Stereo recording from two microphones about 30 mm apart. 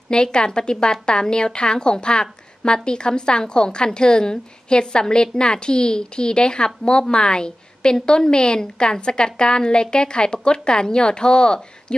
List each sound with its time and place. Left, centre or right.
0.1 s a woman's voice: left